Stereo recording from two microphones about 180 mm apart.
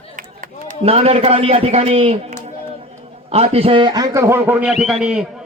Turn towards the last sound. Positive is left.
turn(degrees=-5)  # may be behind; listen again after turning